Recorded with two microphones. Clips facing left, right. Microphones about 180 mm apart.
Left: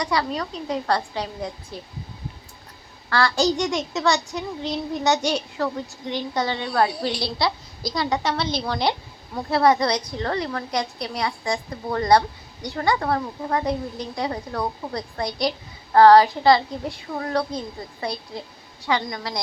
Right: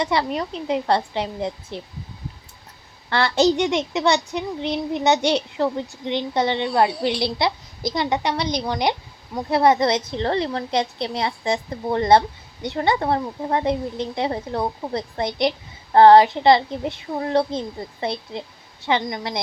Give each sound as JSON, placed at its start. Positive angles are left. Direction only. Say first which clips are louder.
{"t": 0.0, "sound": "a child's voice", "louder": "right 2 dB", "side_deg": -25}
{"t": 3.1, "sound": "a child's voice", "louder": "right 3 dB", "side_deg": -20}